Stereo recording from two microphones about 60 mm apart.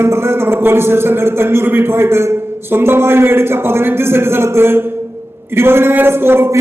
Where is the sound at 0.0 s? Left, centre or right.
Right.